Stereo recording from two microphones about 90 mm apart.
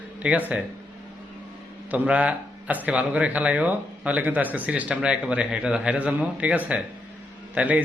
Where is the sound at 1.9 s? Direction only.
15° right (ahead or behind).